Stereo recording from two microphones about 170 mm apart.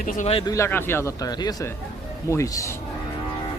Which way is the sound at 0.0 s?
50° left (ahead or behind).